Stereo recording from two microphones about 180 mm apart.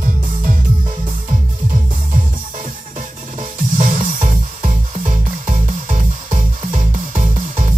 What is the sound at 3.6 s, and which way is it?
Music, 45° right (ahead or behind).